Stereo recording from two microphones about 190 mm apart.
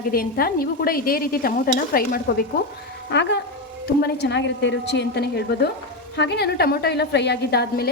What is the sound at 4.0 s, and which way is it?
A woman's voice, 65° left (ahead or behind).